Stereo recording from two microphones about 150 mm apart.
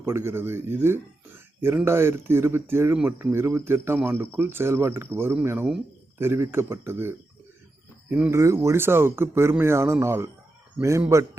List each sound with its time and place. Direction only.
0.0 s speech: 15° right (ahead or behind)